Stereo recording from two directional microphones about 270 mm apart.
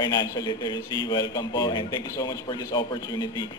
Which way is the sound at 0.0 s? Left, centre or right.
Centre.